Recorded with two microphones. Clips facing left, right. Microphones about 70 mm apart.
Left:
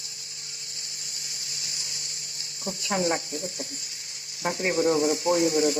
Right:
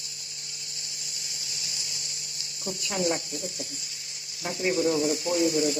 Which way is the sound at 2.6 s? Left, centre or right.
Left.